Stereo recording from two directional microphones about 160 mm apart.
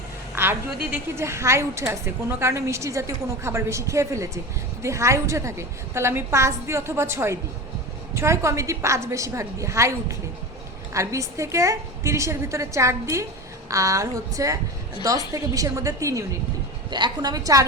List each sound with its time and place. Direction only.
0.3 s a woman's voice: 10° right (ahead or behind)